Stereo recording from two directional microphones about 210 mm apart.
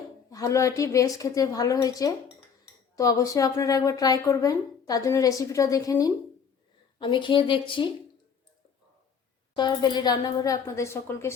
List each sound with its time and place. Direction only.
0.3 s a woman's voice: 15° left (ahead or behind)
9.6 s a woman's voice: 20° left (ahead or behind)